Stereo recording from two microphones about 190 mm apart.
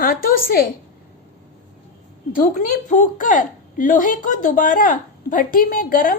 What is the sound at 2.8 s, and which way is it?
Speech, 40° left (ahead or behind).